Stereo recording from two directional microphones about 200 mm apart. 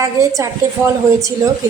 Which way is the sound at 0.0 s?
15° right (ahead or behind).